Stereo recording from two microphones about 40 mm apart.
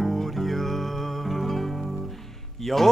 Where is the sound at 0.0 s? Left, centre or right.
Centre.